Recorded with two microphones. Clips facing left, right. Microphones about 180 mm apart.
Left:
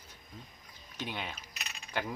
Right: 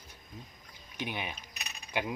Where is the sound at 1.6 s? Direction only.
15° right (ahead or behind).